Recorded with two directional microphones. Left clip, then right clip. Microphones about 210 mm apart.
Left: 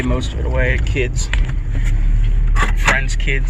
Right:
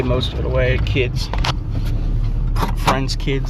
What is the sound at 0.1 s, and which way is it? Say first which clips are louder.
Speech: right 3 dB; 15° right (ahead or behind).